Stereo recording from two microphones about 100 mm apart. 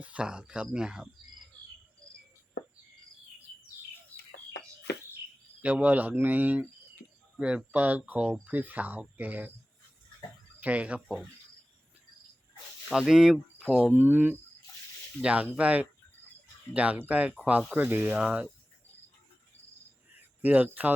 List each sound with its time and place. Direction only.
0.0 s speech: 10° right (ahead or behind)
4.1 s chicken: 30° right (ahead or behind)
5.6 s speech: 15° right (ahead or behind)
10.6 s speech: 15° right (ahead or behind)
12.9 s speech: 5° right (ahead or behind)
13.9 s speech: 20° right (ahead or behind)
20.4 s speech: 15° right (ahead or behind)